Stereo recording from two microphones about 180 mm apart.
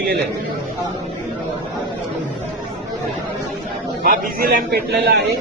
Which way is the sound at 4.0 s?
55° right (ahead or behind).